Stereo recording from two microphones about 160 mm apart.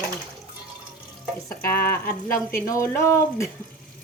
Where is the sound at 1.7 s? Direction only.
65° left (ahead or behind).